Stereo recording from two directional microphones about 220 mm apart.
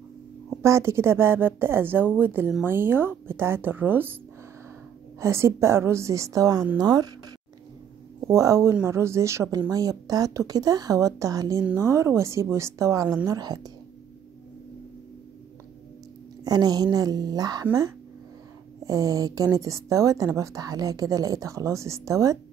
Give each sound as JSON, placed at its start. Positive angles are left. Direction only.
{"t": 0.6, "sound": "speech", "side_deg": -10}
{"t": 5.2, "sound": "speech", "side_deg": -10}
{"t": 8.3, "sound": "speech", "side_deg": -15}
{"t": 16.4, "sound": "speech", "side_deg": -15}